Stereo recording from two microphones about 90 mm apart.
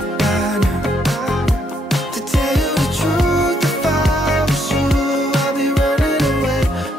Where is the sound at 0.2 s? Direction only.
Centre (ahead or behind).